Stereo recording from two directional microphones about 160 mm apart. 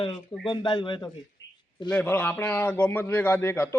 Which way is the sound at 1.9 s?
10° left (ahead or behind).